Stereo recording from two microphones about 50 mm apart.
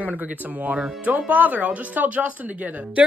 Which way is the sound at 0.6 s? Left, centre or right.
Right.